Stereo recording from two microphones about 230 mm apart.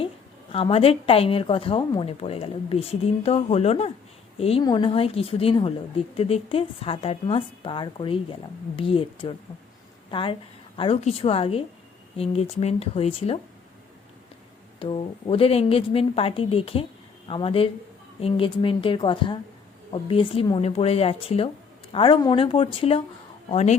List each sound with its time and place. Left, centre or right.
0.5 s a woman's voice: left
14.8 s a woman's voice: left